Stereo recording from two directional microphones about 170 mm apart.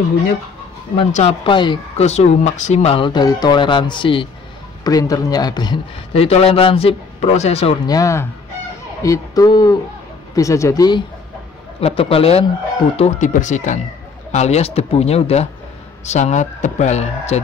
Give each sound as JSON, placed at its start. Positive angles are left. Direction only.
{"t": 1.1, "sound": "speech", "side_deg": 35}
{"t": 7.8, "sound": "speech", "side_deg": 20}
{"t": 11.8, "sound": "speech", "side_deg": 35}